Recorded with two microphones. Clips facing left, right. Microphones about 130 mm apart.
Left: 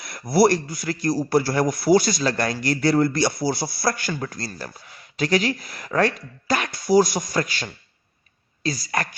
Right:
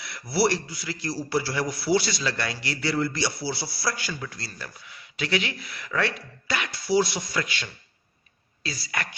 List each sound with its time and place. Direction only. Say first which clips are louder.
0.0 s a man's voice: left 6 dB; 45° left (ahead or behind)